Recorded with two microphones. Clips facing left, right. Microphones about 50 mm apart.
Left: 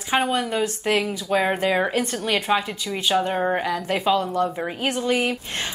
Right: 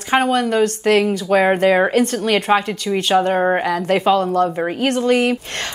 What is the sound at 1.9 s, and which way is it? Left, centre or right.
Speech, right.